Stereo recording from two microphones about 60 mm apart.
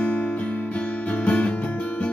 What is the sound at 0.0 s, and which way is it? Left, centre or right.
Guitar, left.